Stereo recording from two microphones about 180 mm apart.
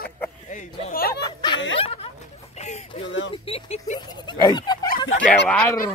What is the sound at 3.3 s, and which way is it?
Speech, 30° left (ahead or behind).